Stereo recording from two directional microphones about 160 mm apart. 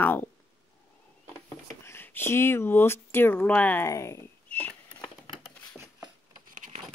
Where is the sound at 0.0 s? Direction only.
10° left (ahead or behind).